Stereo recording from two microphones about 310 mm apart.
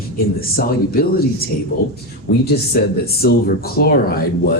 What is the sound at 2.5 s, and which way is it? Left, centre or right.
Speech, left.